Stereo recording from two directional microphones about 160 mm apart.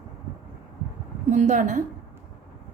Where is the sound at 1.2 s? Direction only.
50° right (ahead or behind).